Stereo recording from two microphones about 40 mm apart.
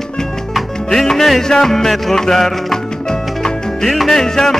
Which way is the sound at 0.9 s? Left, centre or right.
Centre.